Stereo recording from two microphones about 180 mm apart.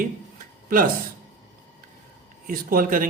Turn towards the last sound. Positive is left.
turn(degrees=-50)  # may be behind; listen again after turning